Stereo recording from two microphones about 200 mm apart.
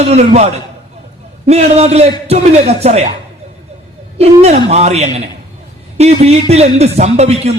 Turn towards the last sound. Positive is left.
turn(degrees=-30)  # may be behind; listen again after turning